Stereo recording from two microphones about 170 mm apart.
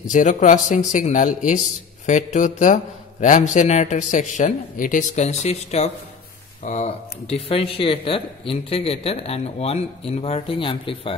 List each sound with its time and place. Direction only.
0.1 s a man's voice: 45° left (ahead or behind); by 11.1 s 30° left (ahead or behind)